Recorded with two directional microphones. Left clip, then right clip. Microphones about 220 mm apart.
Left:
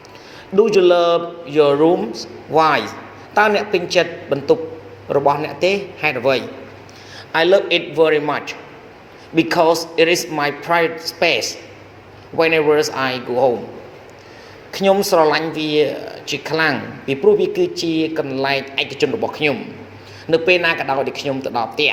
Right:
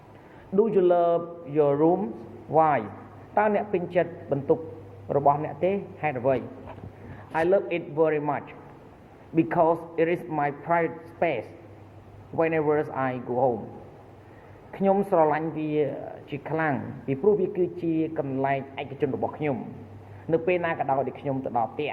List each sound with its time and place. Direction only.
0.5 s speech: 40° left (ahead or behind)
14.7 s speech: 40° left (ahead or behind)